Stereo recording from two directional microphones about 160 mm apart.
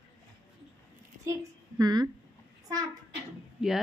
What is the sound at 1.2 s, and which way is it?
Speech, 20° right (ahead or behind).